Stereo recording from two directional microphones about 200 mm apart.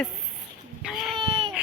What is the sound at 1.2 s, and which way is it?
Baby cry, 25° right (ahead or behind).